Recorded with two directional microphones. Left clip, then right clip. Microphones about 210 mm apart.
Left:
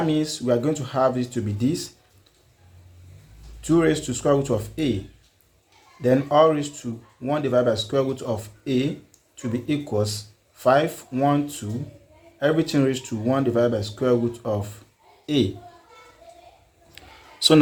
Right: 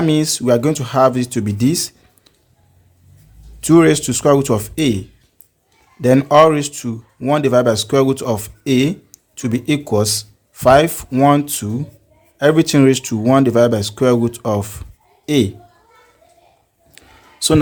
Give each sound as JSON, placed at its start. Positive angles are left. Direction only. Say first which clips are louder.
{"t": 0.0, "sound": "speech", "louder": "right 7 dB", "side_deg": -45}
{"t": 3.6, "sound": "speech", "louder": "right 9 dB", "side_deg": -45}
{"t": 6.0, "sound": "speech", "louder": "right 7 dB", "side_deg": -45}